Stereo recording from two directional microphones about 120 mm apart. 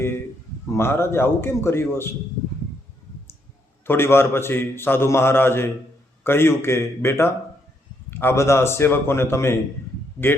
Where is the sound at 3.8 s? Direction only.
20° left (ahead or behind).